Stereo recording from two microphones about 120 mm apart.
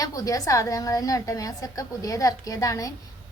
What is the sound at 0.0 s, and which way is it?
A woman's voice, 30° left (ahead or behind).